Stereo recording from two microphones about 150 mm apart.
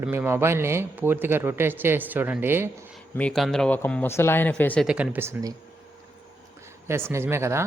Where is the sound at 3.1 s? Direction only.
5° left (ahead or behind).